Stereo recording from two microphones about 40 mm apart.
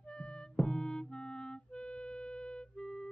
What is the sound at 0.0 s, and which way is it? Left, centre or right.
Music, left.